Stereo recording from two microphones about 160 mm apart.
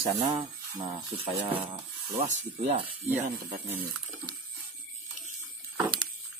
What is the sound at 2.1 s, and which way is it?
Speech, 45° right (ahead or behind).